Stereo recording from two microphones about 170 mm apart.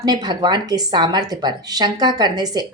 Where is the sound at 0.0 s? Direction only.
25° right (ahead or behind).